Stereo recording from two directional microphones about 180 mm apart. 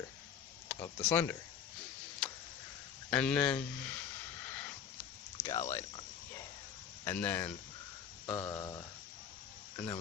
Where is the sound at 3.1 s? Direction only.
5° left (ahead or behind).